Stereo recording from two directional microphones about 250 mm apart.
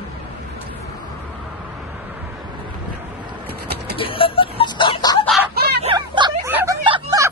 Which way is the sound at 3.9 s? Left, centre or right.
Left.